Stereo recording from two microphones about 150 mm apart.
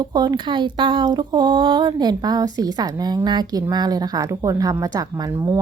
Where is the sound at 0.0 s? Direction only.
25° right (ahead or behind).